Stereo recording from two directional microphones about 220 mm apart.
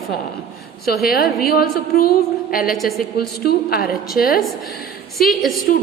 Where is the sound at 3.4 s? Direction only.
45° left (ahead or behind).